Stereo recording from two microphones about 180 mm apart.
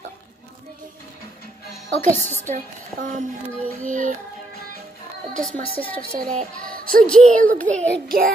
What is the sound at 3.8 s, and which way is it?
Speech, 45° right (ahead or behind).